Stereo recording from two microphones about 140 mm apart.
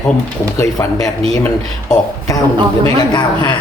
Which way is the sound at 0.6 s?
25° left (ahead or behind).